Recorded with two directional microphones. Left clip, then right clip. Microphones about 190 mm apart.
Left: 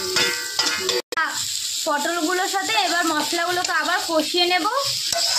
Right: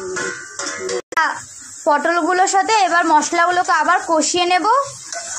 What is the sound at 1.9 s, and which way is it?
A child's voice, 20° right (ahead or behind).